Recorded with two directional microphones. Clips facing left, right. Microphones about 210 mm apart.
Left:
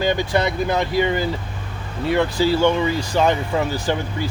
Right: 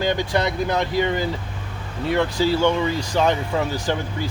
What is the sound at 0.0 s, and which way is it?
Speech, 5° left (ahead or behind).